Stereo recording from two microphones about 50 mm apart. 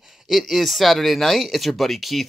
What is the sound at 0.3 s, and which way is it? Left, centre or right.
Speech, centre.